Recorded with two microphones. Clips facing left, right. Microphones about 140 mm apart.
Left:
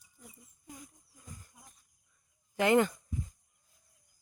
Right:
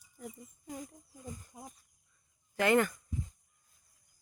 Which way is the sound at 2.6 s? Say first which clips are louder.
Left 2 dB; 20° left (ahead or behind).